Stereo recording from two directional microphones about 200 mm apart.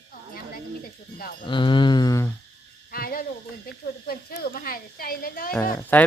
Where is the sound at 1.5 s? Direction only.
25° left (ahead or behind).